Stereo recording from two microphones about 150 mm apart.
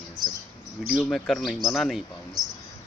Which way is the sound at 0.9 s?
Centre (ahead or behind).